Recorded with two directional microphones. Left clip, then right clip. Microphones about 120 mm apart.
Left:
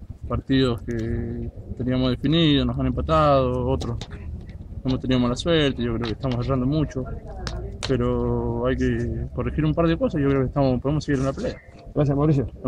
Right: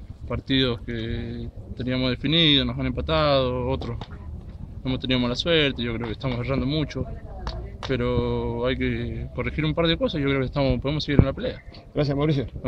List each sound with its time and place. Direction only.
0.3 s speech: 30° right (ahead or behind)
11.9 s a man's voice: 10° right (ahead or behind)